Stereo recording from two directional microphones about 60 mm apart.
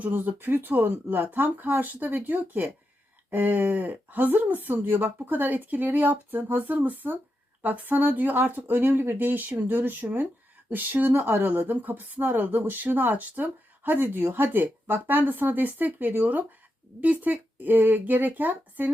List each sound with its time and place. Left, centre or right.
0.0 s speech: right